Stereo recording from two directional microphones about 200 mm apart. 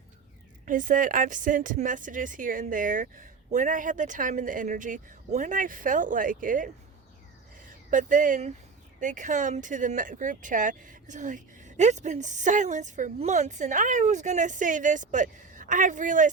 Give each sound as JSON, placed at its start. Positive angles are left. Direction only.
{"t": 0.6, "sound": "speech", "side_deg": -40}